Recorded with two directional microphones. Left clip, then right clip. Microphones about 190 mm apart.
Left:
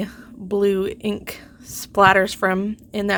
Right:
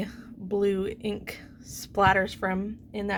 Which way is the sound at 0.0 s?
30° left (ahead or behind).